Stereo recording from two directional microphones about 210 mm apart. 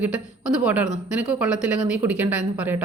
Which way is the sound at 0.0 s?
5° right (ahead or behind).